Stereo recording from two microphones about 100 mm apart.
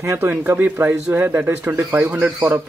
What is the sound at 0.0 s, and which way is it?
Speech, 25° right (ahead or behind).